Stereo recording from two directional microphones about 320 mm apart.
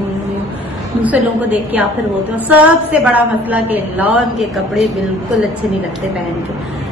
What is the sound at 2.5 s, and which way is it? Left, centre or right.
A woman's voice, centre.